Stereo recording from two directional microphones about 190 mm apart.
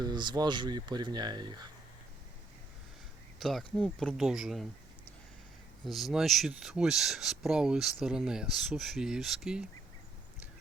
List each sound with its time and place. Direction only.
0.0 s speech: 25° right (ahead or behind)
3.4 s speech: 5° left (ahead or behind)
5.8 s speech: centre (ahead or behind)